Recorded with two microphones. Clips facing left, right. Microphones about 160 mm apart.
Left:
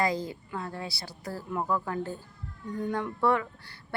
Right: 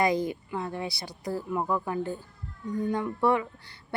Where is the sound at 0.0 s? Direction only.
20° right (ahead or behind).